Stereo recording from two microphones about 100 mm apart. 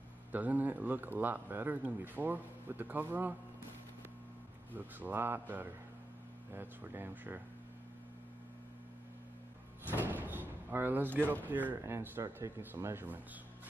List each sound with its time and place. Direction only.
0.3 s speech: 15° right (ahead or behind)
4.7 s speech: 20° right (ahead or behind)
9.8 s door: 20° right (ahead or behind)
11.4 s speech: 20° right (ahead or behind)